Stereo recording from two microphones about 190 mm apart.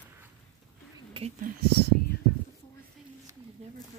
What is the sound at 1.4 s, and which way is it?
Speech, 55° right (ahead or behind).